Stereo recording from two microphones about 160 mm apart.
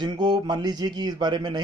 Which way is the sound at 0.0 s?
25° right (ahead or behind).